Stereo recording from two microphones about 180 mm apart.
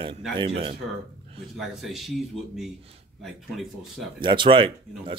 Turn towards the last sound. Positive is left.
turn(degrees=-30)  # may be behind; listen again after turning